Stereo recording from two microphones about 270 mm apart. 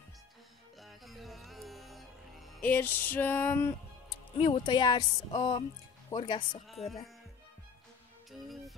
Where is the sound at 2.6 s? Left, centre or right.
Centre.